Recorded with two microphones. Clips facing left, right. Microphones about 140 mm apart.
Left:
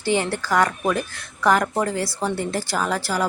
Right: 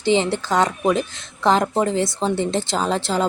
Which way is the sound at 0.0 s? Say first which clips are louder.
Right 4 dB; 20° right (ahead or behind).